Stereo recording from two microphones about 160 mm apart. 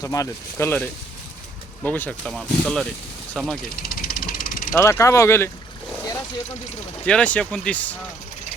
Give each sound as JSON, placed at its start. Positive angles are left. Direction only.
{"t": 0.0, "sound": "speech", "side_deg": 20}
{"t": 3.8, "sound": "vehicle", "side_deg": 65}
{"t": 4.7, "sound": "speech", "side_deg": 20}
{"t": 7.0, "sound": "speech", "side_deg": 10}